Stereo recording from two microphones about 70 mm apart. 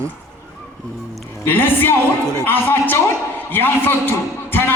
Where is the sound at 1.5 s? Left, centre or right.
Left.